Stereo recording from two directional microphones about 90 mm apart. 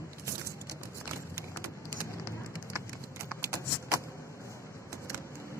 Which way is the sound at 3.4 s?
35° right (ahead or behind).